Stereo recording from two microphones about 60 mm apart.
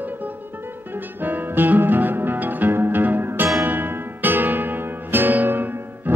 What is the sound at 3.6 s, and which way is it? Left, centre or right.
Music, right.